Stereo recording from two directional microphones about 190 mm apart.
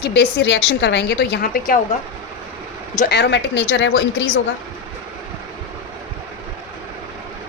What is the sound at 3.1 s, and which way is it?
A woman's voice, 65° left (ahead or behind).